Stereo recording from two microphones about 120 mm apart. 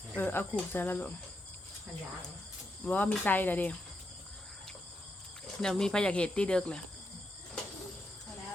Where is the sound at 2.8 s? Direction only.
15° left (ahead or behind).